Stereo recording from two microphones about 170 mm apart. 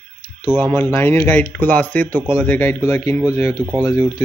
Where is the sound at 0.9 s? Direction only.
15° left (ahead or behind).